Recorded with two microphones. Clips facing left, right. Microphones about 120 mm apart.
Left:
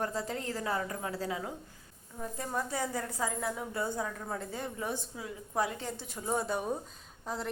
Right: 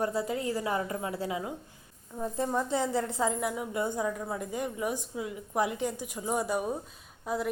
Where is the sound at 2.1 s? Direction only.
25° right (ahead or behind).